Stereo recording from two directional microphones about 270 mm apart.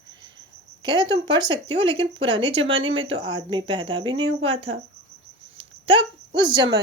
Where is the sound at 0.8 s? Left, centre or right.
Centre.